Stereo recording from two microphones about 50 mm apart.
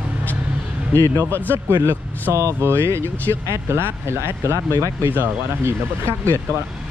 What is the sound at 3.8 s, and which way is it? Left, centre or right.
Speech, right.